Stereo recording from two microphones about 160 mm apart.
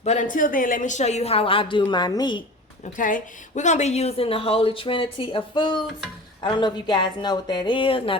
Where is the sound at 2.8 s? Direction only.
55° left (ahead or behind).